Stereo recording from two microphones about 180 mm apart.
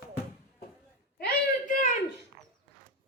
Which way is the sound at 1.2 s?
50° left (ahead or behind).